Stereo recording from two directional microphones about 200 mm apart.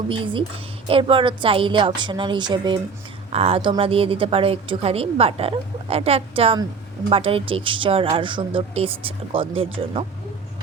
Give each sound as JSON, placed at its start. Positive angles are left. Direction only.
{"t": 0.1, "sound": "speech", "side_deg": -25}